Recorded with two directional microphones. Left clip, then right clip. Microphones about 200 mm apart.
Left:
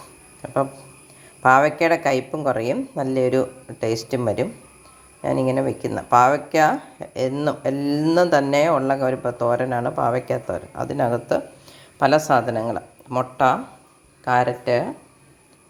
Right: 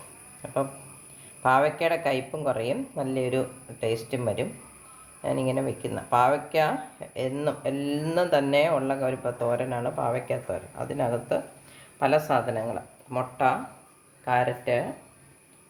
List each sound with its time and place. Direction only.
0.4 s speech: 35° left (ahead or behind)